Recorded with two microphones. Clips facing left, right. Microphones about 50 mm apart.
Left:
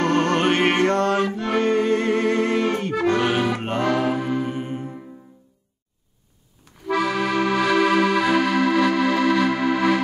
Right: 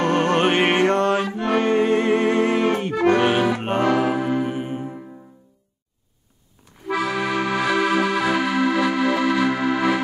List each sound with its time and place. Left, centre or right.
0.0 s music: right
3.3 s accordion: centre
3.6 s music: right
3.9 s music: centre
6.9 s accordion: centre